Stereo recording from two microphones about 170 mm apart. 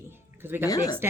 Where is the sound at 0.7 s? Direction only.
20° left (ahead or behind).